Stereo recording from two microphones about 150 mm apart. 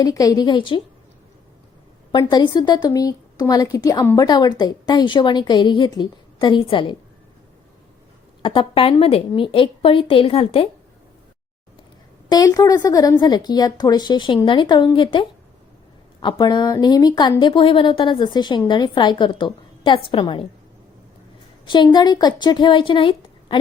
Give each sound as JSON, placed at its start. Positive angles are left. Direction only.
{"t": 0.0, "sound": "a woman's voice", "side_deg": 25}
{"t": 2.1, "sound": "a woman's voice", "side_deg": 30}
{"t": 8.4, "sound": "a woman's voice", "side_deg": 35}
{"t": 12.3, "sound": "a woman's voice", "side_deg": 25}
{"t": 21.6, "sound": "a woman's voice", "side_deg": 30}